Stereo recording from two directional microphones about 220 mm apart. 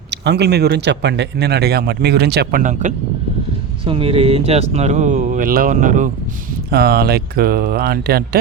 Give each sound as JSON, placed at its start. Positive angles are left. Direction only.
{"t": 0.1, "sound": "speech", "side_deg": -50}
{"t": 6.7, "sound": "speech", "side_deg": -45}